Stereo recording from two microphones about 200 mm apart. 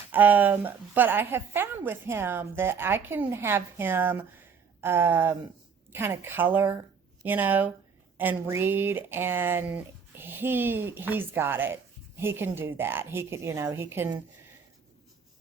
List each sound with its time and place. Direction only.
0.1 s a woman's voice: 10° right (ahead or behind)